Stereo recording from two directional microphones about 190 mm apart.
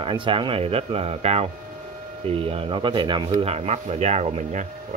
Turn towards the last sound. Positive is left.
turn(degrees=-35)  # may be behind; listen again after turning